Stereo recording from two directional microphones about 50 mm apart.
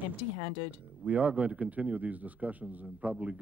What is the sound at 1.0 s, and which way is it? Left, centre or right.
Speech, right.